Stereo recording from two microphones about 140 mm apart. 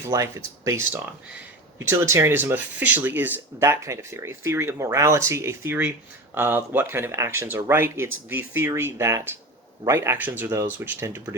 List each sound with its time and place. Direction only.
0.0 s speech: 20° right (ahead or behind)